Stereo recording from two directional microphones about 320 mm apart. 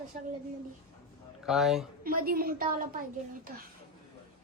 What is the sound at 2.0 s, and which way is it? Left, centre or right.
Speech, right.